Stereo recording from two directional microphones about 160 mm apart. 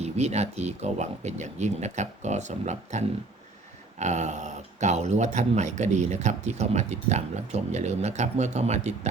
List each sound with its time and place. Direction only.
0.0 s speech: 45° right (ahead or behind)